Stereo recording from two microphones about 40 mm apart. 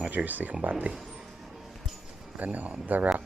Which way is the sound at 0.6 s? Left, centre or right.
Right.